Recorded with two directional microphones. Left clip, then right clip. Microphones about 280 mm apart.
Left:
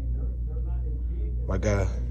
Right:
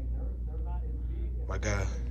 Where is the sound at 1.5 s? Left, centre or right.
Centre.